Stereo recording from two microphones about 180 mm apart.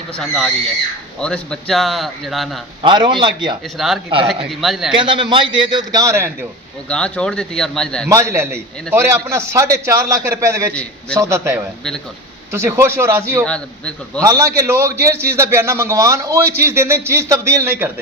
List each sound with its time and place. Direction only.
0.2 s a man's voice: centre (ahead or behind)
2.8 s a man's voice: 25° right (ahead or behind)
3.8 s a man's voice: centre (ahead or behind)
4.9 s a man's voice: 25° right (ahead or behind)
6.8 s a man's voice: 5° left (ahead or behind)
8.1 s a man's voice: 15° right (ahead or behind)
13.4 s a man's voice: 5° left (ahead or behind)
14.2 s a man's voice: 15° right (ahead or behind)